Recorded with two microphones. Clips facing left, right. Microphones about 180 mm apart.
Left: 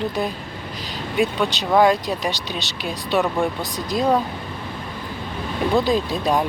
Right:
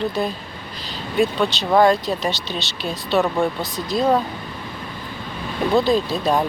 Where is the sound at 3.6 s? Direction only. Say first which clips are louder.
Right 1 dB; 15° left (ahead or behind).